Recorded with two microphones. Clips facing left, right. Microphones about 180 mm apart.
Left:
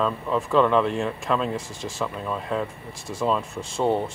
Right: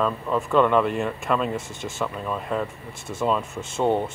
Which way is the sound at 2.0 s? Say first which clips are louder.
Right 1 dB; centre (ahead or behind).